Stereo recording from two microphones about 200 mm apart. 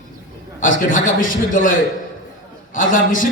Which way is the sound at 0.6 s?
40° left (ahead or behind).